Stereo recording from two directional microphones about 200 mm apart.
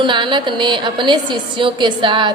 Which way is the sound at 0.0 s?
25° right (ahead or behind).